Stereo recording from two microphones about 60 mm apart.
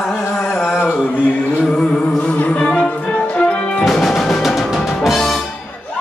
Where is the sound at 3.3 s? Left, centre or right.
Centre.